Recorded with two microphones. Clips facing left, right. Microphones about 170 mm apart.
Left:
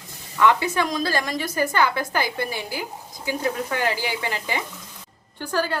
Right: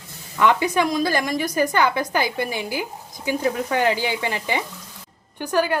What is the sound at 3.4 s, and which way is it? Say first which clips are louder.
Sizzle: right 4 dB; 20° right (ahead or behind).